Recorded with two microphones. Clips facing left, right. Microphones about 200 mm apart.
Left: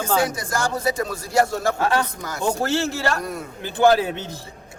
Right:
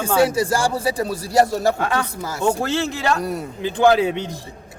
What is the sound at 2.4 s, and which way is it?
Speech, 15° right (ahead or behind).